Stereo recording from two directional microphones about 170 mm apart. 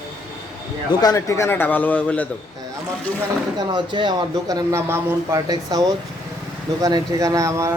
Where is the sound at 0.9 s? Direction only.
20° left (ahead or behind).